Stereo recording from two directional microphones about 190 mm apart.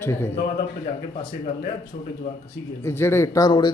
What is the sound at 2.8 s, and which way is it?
Speech, 15° left (ahead or behind).